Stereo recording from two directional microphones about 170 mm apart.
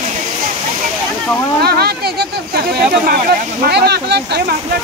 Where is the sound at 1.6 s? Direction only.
65° right (ahead or behind).